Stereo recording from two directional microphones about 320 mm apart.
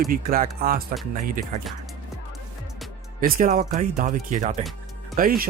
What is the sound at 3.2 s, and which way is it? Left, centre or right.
Speech, right.